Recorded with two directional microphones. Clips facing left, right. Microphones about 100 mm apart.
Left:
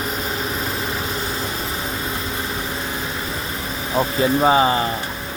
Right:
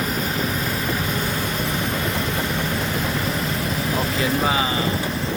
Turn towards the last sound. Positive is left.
turn(degrees=35)  # may be behind; listen again after turning